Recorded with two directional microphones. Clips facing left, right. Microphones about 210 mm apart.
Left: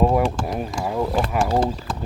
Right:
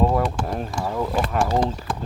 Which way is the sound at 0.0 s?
10° left (ahead or behind).